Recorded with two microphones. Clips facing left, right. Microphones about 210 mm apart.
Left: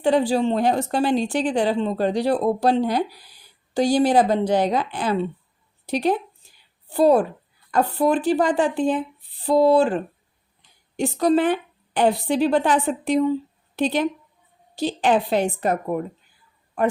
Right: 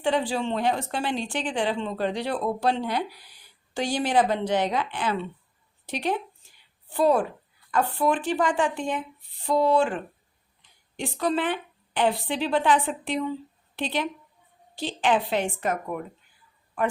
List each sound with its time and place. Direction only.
0.0 s a woman's voice: 40° left (ahead or behind)